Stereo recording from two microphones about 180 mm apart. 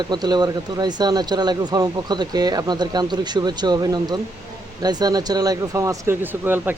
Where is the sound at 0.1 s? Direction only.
25° right (ahead or behind).